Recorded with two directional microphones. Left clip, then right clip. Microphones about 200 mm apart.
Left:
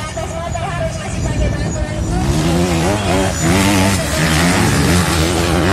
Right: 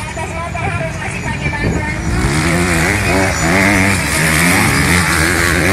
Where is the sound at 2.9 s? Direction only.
25° right (ahead or behind).